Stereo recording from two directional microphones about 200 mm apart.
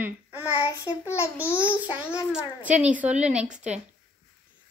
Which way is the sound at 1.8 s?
5° right (ahead or behind).